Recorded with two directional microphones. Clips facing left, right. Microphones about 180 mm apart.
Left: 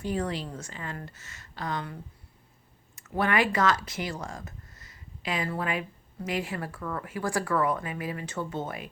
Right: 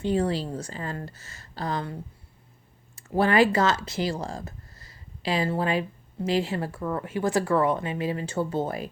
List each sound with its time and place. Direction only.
0.0 s a woman's voice: 30° right (ahead or behind)